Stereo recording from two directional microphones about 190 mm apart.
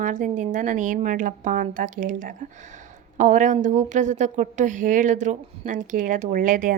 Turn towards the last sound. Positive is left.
turn(degrees=-45)  # may be behind; listen again after turning